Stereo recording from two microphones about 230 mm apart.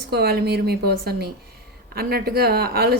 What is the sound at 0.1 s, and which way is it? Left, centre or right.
A woman's voice, right.